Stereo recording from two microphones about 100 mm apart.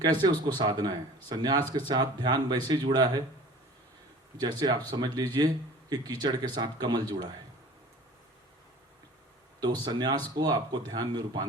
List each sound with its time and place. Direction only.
0.0 s speech: 50° right (ahead or behind)
4.4 s speech: 50° right (ahead or behind)
9.6 s speech: 45° right (ahead or behind)